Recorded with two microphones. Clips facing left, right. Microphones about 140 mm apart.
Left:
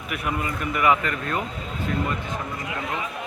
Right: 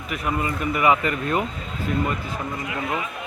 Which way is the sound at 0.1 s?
Centre (ahead or behind).